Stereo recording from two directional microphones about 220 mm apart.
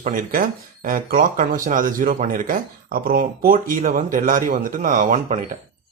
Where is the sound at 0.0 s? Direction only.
40° right (ahead or behind).